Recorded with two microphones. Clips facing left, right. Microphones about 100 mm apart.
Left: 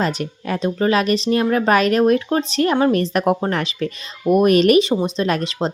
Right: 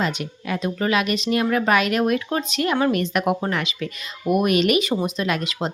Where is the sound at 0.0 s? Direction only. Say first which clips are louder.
Left 3 dB; 40° left (ahead or behind).